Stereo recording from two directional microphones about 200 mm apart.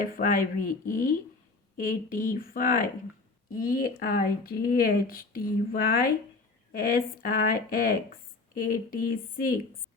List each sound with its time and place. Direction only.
0.0 s speech: 45° left (ahead or behind)